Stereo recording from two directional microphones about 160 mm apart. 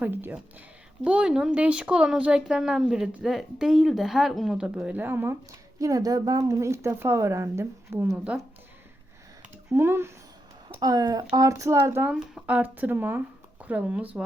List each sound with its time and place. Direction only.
0.0 s speech: 10° right (ahead or behind)
9.6 s speech: 15° right (ahead or behind)